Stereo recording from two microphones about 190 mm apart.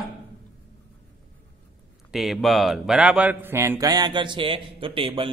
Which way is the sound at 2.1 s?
Centre (ahead or behind).